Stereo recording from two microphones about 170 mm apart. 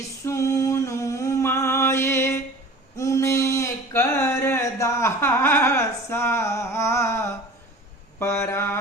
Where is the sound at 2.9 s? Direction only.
20° left (ahead or behind).